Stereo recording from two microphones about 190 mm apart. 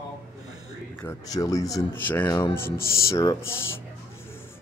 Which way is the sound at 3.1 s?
20° left (ahead or behind).